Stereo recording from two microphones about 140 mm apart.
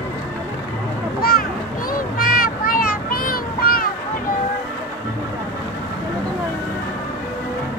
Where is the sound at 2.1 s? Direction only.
90° left.